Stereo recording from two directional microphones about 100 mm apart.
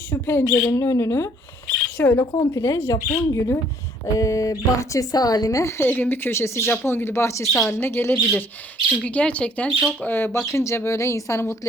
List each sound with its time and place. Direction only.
0.1 s speech: 25° left (ahead or behind)
2.4 s speech: 30° left (ahead or behind)
7.4 s a woman's voice: centre (ahead or behind)
7.7 s speech: 25° left (ahead or behind)
9.0 s speech: 10° left (ahead or behind); by 11.7 s 30° left (ahead or behind)